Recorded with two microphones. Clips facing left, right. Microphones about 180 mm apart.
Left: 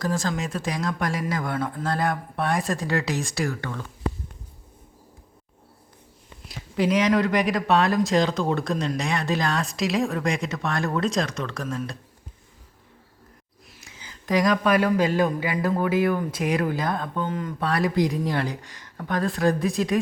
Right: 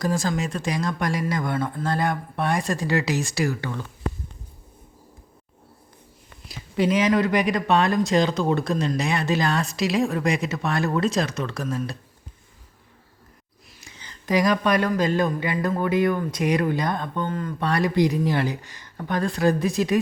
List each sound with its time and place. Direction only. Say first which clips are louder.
0.0 s a man's voice: right 2 dB; 10° right (ahead or behind)
6.7 s a man's voice: right 1 dB; centre (ahead or behind)
13.8 s speech: right 1 dB; 5° left (ahead or behind)
15.8 s a man's voice: right 2 dB; 5° left (ahead or behind)
17.2 s speech: right 1 dB; 15° left (ahead or behind)
17.6 s a man's voice: right 2 dB; centre (ahead or behind)